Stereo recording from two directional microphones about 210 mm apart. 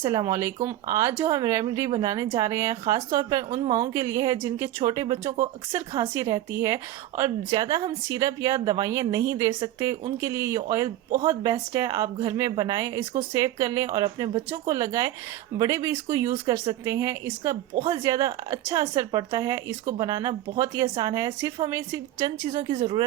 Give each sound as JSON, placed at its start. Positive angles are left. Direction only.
{"t": 0.0, "sound": "speech", "side_deg": -15}